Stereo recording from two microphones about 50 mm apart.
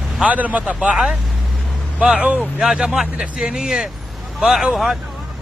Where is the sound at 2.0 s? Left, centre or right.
Right.